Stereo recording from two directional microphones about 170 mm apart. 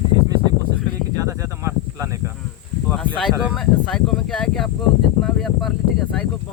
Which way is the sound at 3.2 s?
Centre (ahead or behind).